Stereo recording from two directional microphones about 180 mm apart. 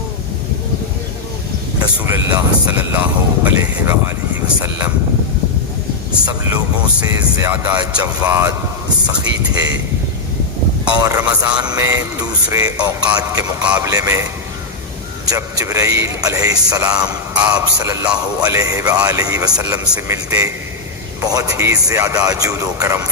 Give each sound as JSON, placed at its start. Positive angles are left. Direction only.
{"t": 2.0, "sound": "speech", "side_deg": -15}
{"t": 6.2, "sound": "speech", "side_deg": -15}
{"t": 10.9, "sound": "speech", "side_deg": -20}
{"t": 15.3, "sound": "speech", "side_deg": -20}